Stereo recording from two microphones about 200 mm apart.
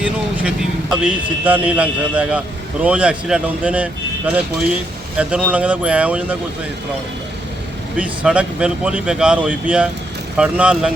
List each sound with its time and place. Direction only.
0.0 s speech: 5° right (ahead or behind)
7.9 s speech: 5° right (ahead or behind)